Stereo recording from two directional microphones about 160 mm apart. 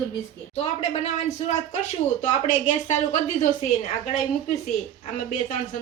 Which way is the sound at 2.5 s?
50° left (ahead or behind).